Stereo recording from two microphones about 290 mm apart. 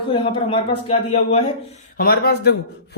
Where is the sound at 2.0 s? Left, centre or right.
Left.